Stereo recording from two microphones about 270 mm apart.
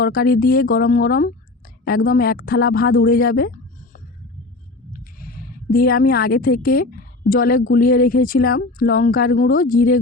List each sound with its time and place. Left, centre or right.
0.0 s a woman's voice: left
4.9 s a sound: left
7.7 s speech: left